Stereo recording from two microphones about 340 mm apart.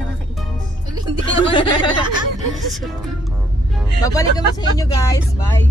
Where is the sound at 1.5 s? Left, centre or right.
Centre.